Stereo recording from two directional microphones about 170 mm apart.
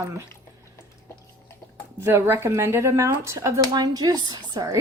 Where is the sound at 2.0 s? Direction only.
15° right (ahead or behind).